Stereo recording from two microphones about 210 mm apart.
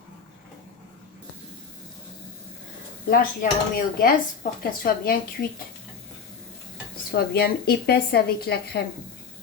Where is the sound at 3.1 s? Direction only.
45° left (ahead or behind).